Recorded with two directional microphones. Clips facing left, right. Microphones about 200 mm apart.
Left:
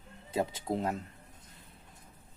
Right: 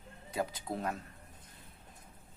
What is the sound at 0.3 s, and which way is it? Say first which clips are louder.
Speech: left 4 dB; 25° left (ahead or behind).